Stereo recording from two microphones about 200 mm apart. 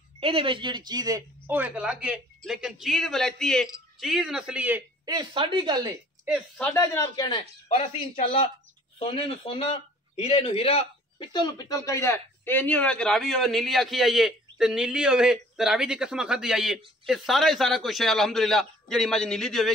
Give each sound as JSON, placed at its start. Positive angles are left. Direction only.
{"t": 0.2, "sound": "a man's voice", "side_deg": -25}
{"t": 5.0, "sound": "speech", "side_deg": -20}
{"t": 6.2, "sound": "a man's voice", "side_deg": 0}
{"t": 6.7, "sound": "speech", "side_deg": 15}
{"t": 7.6, "sound": "a man's voice", "side_deg": 30}